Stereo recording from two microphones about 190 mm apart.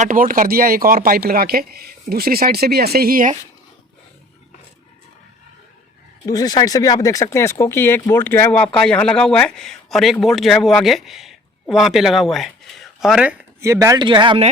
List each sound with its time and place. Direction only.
0.0 s speech: 45° right (ahead or behind)
6.2 s speech: 20° left (ahead or behind); by 13.3 s 5° right (ahead or behind)
13.6 s speech: 15° right (ahead or behind)